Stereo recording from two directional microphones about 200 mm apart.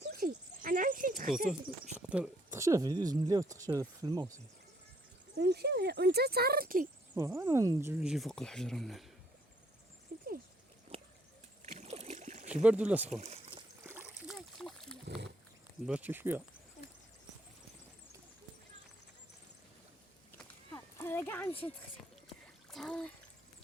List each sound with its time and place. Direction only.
0.0 s dog: 50° right (ahead or behind)
2.0 s speech: 5° right (ahead or behind)
5.4 s speech: 55° right (ahead or behind)
7.2 s speech: 15° right (ahead or behind)
10.1 s a sound: 55° right (ahead or behind)
10.9 s a sound: 25° right (ahead or behind)
11.6 s rowboat: 35° right (ahead or behind)
12.6 s speech: 5° right (ahead or behind)
13.1 s rowboat: 30° right (ahead or behind)
13.8 s splash: 10° right (ahead or behind)
15.0 s wild animals: 60° right (ahead or behind)
15.9 s speech: 10° right (ahead or behind)
20.7 s a sound: 10° left (ahead or behind)
22.7 s speech: 5° left (ahead or behind)